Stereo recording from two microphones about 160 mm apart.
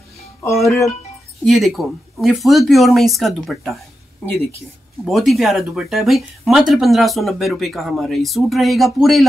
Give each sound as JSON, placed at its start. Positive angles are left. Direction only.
{"t": 0.4, "sound": "music", "side_deg": 20}
{"t": 1.4, "sound": "speech", "side_deg": 0}
{"t": 5.0, "sound": "speech", "side_deg": 0}